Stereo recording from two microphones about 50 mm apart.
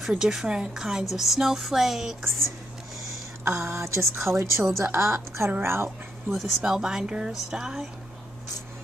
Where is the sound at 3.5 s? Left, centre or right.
Right.